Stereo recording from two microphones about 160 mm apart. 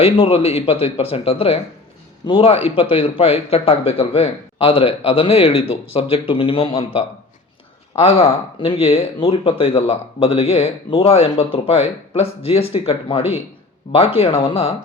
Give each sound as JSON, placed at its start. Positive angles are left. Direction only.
{"t": 0.0, "sound": "speech", "side_deg": 35}